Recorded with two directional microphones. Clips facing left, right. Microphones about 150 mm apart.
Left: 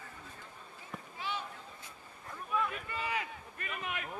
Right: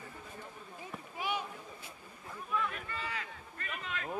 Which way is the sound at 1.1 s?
15° right (ahead or behind).